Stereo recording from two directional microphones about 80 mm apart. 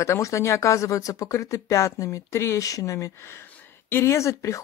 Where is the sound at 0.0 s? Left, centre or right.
Left.